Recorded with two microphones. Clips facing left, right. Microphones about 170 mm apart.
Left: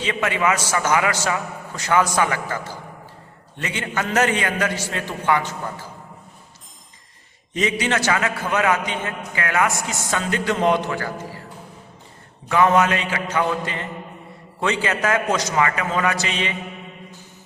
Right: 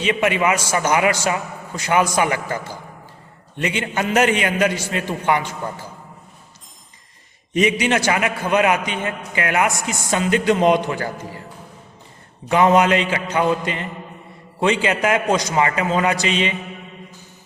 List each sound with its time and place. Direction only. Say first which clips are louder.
0.0 s a man's voice: right 3 dB; 20° right (ahead or behind)
7.5 s a man's voice: right 4 dB; 15° right (ahead or behind)
12.5 s a man's voice: right 2 dB; 20° right (ahead or behind)